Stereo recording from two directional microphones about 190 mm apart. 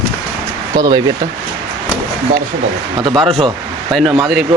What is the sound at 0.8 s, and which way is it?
Speech, 20° right (ahead or behind).